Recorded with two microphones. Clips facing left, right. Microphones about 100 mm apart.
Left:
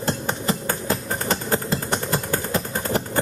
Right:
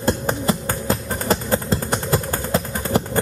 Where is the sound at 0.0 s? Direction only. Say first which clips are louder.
Right 4 dB; 40° right (ahead or behind).